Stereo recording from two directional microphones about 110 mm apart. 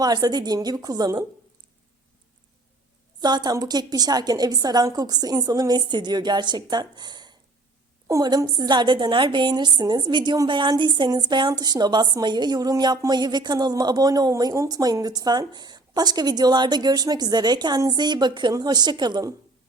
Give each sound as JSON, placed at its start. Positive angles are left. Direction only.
{"t": 0.0, "sound": "a woman's voice", "side_deg": -40}
{"t": 3.2, "sound": "a woman's voice", "side_deg": -40}